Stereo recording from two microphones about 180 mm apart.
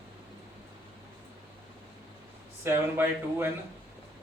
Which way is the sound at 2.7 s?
15° right (ahead or behind).